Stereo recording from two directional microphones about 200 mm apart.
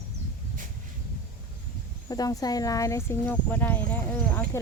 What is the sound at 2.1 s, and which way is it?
Speech, 20° left (ahead or behind).